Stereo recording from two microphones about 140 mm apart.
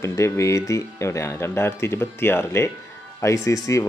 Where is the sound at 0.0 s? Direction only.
20° left (ahead or behind).